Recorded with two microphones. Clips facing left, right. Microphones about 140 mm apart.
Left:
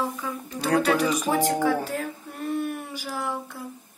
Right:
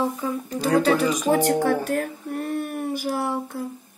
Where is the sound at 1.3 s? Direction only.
60° right (ahead or behind).